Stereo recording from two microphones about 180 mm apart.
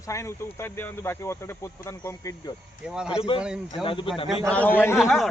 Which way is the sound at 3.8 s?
30° left (ahead or behind).